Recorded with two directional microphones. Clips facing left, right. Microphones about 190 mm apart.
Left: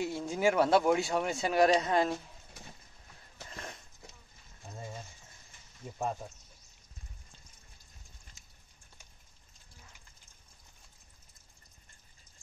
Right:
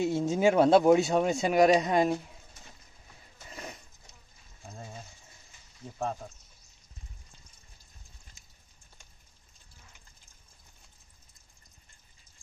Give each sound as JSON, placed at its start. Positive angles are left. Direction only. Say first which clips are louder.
{"t": 0.0, "sound": "speech", "louder": "right 5 dB", "side_deg": -25}
{"t": 3.4, "sound": "dog", "louder": "right 2 dB", "side_deg": -5}